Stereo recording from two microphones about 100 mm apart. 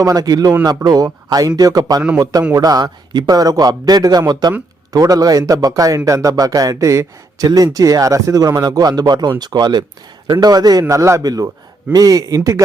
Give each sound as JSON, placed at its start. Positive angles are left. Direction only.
{"t": 0.0, "sound": "a man's voice", "side_deg": -40}